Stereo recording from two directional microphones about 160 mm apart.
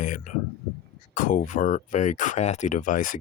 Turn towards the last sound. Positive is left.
turn(degrees=55)  # may be behind; listen again after turning